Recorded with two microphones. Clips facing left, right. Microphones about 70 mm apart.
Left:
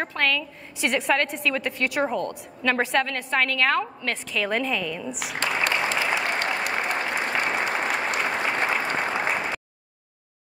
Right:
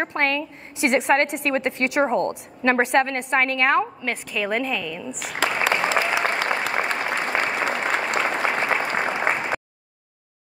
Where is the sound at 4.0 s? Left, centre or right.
Centre.